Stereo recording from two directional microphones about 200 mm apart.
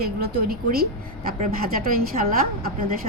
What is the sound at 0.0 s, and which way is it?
A woman's voice, 50° right (ahead or behind).